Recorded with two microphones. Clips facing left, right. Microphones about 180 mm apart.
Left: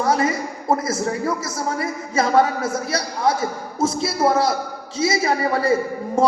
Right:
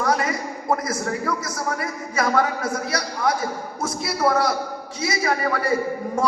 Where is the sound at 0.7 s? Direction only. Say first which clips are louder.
Left 3 dB; 25° left (ahead or behind).